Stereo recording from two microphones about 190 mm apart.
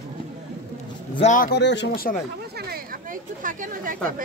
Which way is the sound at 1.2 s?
40° left (ahead or behind).